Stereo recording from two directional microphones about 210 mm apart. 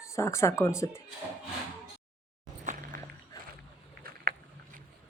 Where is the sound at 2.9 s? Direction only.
40° right (ahead or behind).